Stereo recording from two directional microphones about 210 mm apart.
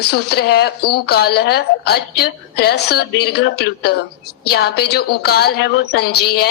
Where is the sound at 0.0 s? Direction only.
50° left (ahead or behind).